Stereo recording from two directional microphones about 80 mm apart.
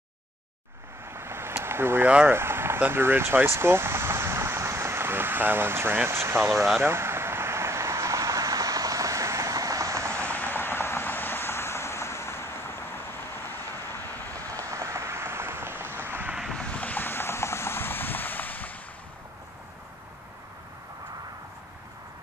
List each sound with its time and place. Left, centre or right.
1.1 s vehicle: right
2.2 s speech: right
6.8 s a sound: right
10.3 s vehicle: left
14.3 s rain on surface: right
16.5 s a sound: centre